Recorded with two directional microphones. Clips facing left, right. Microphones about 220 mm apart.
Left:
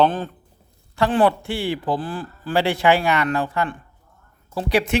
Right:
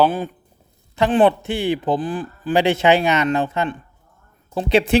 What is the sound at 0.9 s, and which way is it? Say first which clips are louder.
A man's voice: right 3 dB; 20° right (ahead or behind).